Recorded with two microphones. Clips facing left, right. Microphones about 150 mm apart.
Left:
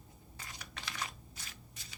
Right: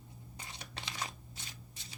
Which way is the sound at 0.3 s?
25° right (ahead or behind).